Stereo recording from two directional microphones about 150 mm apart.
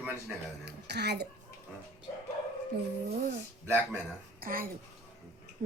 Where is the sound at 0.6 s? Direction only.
90° right.